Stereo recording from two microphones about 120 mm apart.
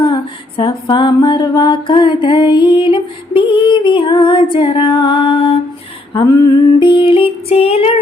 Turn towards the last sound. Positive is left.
turn(degrees=55)  # may be behind; listen again after turning